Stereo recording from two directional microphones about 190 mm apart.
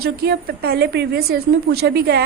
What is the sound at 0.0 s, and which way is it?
A woman's voice, 55° right (ahead or behind).